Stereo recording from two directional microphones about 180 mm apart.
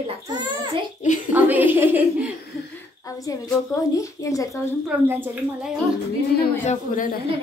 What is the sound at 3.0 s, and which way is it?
A woman's voice, 20° left (ahead or behind).